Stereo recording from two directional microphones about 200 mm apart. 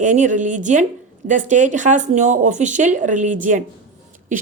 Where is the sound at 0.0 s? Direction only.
40° right (ahead or behind).